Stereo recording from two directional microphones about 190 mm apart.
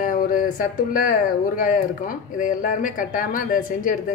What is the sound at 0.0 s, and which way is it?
Speech, 45° left (ahead or behind).